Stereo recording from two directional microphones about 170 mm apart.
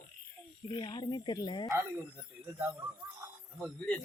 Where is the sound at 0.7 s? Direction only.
30° left (ahead or behind).